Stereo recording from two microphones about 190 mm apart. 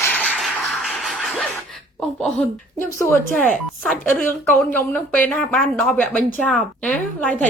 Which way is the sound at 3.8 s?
Centre (ahead or behind).